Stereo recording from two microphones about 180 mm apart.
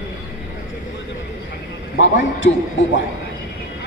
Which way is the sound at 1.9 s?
90° left.